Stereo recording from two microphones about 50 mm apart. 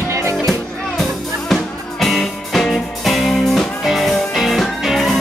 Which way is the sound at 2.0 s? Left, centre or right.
Centre.